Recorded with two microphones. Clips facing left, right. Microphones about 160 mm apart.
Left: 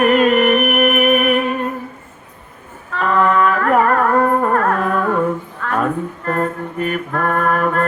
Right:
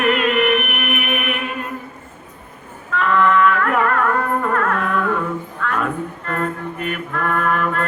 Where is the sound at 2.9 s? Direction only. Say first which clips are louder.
Left 1 dB; 40° left (ahead or behind).